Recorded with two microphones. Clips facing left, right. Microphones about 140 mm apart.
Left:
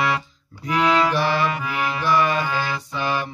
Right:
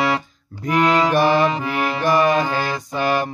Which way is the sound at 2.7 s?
45° right (ahead or behind).